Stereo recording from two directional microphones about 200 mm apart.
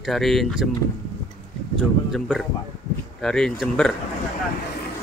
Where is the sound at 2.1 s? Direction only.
Centre (ahead or behind).